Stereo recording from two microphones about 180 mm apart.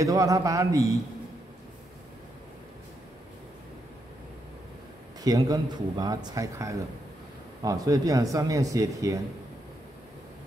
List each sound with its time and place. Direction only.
0.0 s speech: 20° right (ahead or behind)
5.2 s speech: 20° right (ahead or behind)